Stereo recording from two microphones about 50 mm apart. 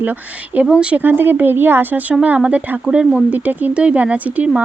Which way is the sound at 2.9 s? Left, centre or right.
Right.